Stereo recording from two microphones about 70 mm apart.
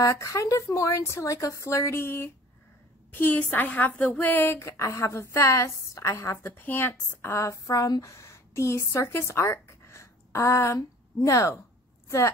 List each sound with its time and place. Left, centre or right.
0.0 s a woman's voice: left